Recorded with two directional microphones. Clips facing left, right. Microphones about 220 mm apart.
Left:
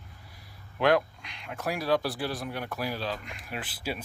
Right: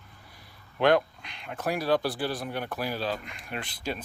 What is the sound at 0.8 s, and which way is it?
Speech, centre (ahead or behind).